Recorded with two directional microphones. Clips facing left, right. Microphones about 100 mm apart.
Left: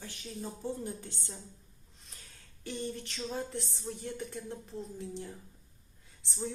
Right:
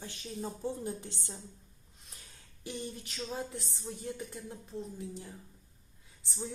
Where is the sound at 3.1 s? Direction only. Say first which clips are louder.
Right 1 dB; 5° right (ahead or behind).